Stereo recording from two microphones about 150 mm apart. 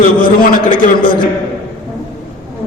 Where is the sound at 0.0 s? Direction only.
70° left (ahead or behind).